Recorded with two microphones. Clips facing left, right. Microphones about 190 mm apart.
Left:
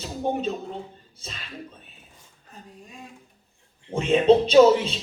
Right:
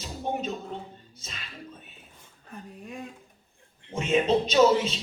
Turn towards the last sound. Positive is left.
turn(degrees=30)  # may be behind; listen again after turning